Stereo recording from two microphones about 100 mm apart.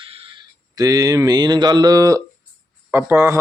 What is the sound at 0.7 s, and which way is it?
Speech, 35° right (ahead or behind).